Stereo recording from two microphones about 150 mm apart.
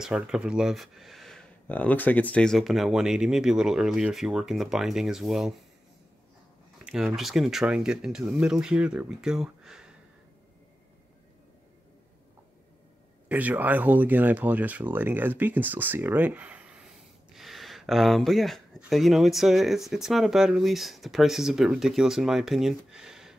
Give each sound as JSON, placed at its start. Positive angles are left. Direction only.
{"t": 0.0, "sound": "speech", "side_deg": -5}
{"t": 6.8, "sound": "a sound", "side_deg": -5}
{"t": 7.2, "sound": "speech", "side_deg": 0}
{"t": 13.3, "sound": "speech", "side_deg": -10}